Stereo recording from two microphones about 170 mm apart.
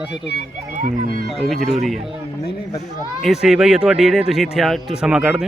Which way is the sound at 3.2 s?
5° right (ahead or behind).